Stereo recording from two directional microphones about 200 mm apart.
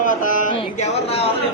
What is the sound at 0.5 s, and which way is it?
Speech, 30° left (ahead or behind).